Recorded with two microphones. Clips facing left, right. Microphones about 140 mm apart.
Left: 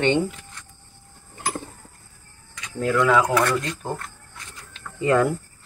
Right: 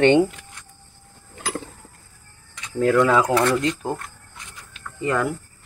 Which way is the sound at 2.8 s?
45° right (ahead or behind).